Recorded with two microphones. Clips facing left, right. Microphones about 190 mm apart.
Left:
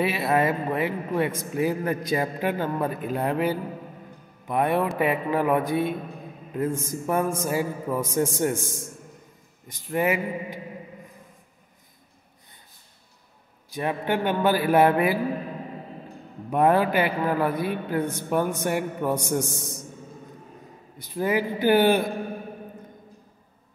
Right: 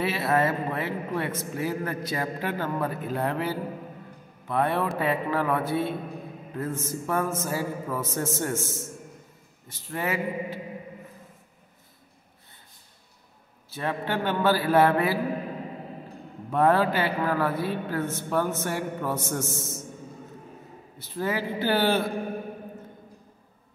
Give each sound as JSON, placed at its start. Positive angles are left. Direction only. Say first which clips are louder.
{"t": 0.0, "sound": "a man's voice", "louder": "left 2 dB", "side_deg": 15}
{"t": 13.7, "sound": "a man's voice", "louder": "left 3 dB", "side_deg": 15}
{"t": 16.4, "sound": "a man's voice", "louder": "left 1 dB", "side_deg": 15}
{"t": 21.0, "sound": "a man's voice", "louder": "left 4 dB", "side_deg": 15}